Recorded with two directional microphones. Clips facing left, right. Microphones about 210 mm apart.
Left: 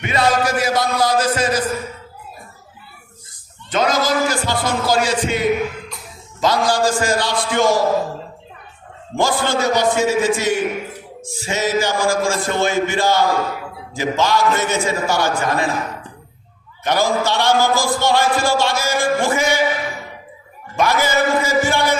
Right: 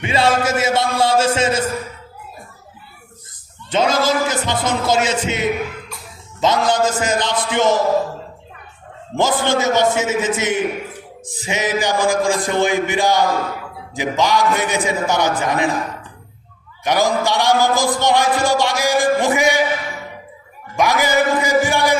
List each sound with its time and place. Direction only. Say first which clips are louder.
0.0 s speech: right 1 dB; 30° right (ahead or behind)
3.7 s speech: right 1 dB; 25° right (ahead or behind)
9.1 s a man's voice: right 1 dB; 20° right (ahead or behind)
16.8 s a man's voice: right 1 dB; 15° right (ahead or behind)
20.7 s a man's voice: right 1 dB; 15° right (ahead or behind)